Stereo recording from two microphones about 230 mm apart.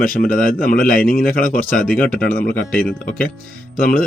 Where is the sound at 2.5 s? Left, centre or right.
Centre.